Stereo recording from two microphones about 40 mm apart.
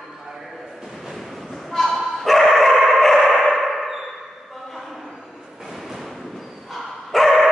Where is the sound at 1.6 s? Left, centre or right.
Centre.